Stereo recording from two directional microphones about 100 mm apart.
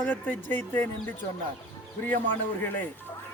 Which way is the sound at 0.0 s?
20° left (ahead or behind).